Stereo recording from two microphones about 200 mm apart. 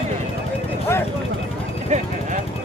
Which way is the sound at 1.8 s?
35° right (ahead or behind).